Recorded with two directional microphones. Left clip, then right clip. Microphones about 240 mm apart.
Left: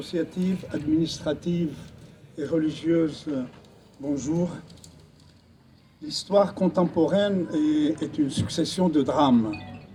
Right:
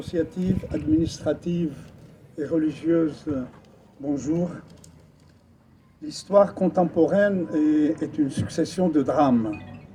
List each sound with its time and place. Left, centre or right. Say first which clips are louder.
0.0 s a man's voice: right 2 dB; left
6.1 s speech: right 3 dB; centre